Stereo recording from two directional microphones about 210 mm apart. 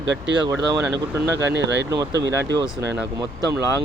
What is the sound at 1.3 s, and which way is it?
Speech, 55° right (ahead or behind).